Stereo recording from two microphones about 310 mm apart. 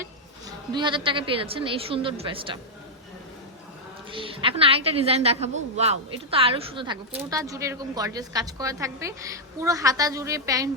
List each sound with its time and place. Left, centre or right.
0.7 s a woman's voice: centre
4.1 s a woman's voice: centre